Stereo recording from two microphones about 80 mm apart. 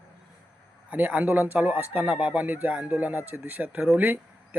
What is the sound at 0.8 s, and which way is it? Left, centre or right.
A man's voice, centre.